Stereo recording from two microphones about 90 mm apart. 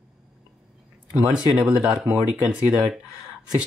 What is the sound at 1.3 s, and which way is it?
Speech, 10° right (ahead or behind).